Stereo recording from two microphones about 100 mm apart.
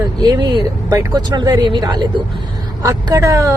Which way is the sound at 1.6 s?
50° right (ahead or behind).